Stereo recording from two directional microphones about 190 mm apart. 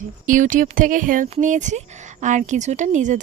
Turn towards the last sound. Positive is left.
turn(degrees=-40)  # may be behind; listen again after turning